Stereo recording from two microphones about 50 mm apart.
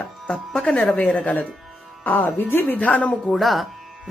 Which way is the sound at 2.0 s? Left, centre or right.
Left.